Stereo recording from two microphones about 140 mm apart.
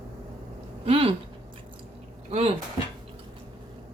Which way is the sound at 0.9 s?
45° right (ahead or behind).